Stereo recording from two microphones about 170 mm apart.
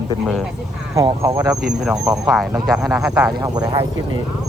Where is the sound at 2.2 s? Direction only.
5° right (ahead or behind).